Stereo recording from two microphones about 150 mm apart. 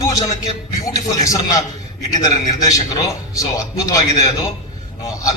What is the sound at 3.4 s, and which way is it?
Speech, 20° left (ahead or behind).